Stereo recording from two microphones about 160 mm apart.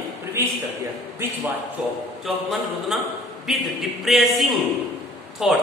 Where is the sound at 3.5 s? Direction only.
Centre (ahead or behind).